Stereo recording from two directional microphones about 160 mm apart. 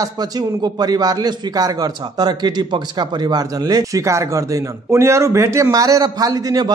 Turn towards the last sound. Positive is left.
turn(degrees=-25)  # may be behind; listen again after turning